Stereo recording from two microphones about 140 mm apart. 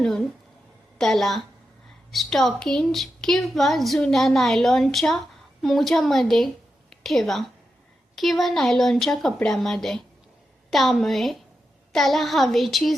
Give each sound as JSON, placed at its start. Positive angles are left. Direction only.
{"t": 0.9, "sound": "a woman's voice", "side_deg": 0}